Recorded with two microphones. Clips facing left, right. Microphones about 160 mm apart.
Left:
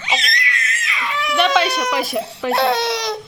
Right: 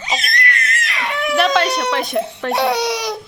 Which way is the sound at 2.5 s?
15° right (ahead or behind).